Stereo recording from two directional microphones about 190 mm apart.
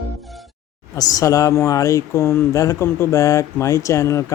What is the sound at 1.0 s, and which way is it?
Speech, 20° left (ahead or behind).